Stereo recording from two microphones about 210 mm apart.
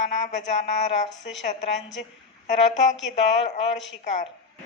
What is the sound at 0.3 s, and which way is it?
Speech, 35° left (ahead or behind).